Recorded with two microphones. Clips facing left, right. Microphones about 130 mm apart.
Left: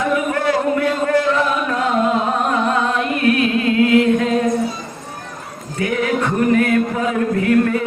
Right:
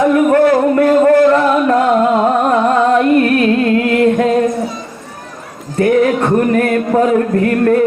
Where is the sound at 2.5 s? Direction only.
45° right (ahead or behind).